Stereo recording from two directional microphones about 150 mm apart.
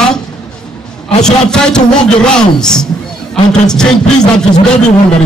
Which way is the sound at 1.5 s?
5° left (ahead or behind).